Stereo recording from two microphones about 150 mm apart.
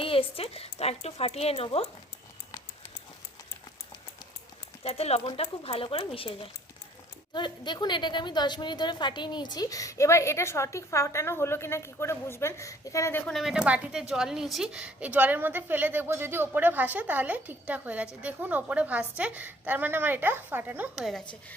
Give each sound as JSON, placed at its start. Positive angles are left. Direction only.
{"t": 0.0, "sound": "speech", "side_deg": 35}
{"t": 4.8, "sound": "a woman's voice", "side_deg": 40}
{"t": 13.3, "sound": "a woman's voice", "side_deg": -5}
{"t": 21.0, "sound": "a woman's voice", "side_deg": 0}